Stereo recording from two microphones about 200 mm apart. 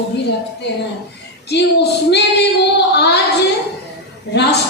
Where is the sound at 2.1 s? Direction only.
55° left (ahead or behind).